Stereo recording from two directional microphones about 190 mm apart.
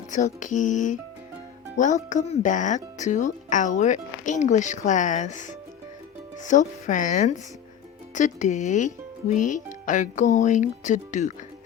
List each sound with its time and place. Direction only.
0.1 s speech: 40° left (ahead or behind)